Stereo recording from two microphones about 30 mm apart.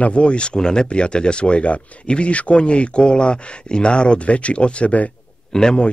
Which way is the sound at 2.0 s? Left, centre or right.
Left.